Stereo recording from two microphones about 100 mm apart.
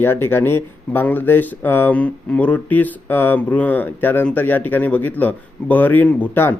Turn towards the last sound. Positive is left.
turn(degrees=20)  # may be behind; listen again after turning